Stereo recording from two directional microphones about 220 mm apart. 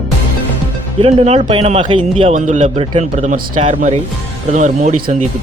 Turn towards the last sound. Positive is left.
turn(degrees=-35)  # may be behind; listen again after turning